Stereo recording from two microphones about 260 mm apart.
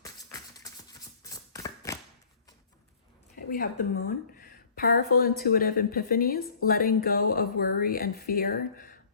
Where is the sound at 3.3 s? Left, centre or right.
Left.